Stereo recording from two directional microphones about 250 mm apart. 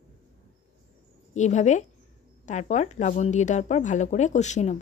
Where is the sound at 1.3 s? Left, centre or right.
Left.